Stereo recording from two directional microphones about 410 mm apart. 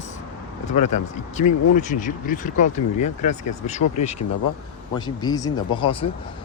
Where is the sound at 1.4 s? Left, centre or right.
Centre.